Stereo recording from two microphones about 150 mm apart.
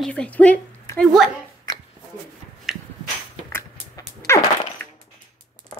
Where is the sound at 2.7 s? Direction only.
Centre (ahead or behind).